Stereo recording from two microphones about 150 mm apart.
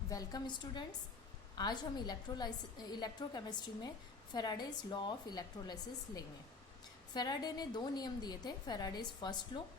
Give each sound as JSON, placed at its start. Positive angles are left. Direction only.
{"t": 0.1, "sound": "a woman's voice", "side_deg": 25}